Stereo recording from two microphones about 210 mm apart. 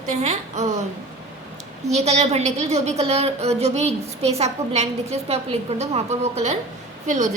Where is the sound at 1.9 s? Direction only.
30° right (ahead or behind).